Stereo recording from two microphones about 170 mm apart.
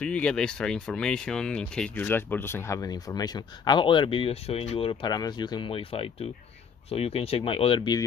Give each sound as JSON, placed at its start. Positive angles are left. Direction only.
{"t": 0.0, "sound": "speech", "side_deg": 5}